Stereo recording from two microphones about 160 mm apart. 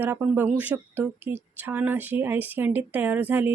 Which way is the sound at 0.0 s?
15° right (ahead or behind).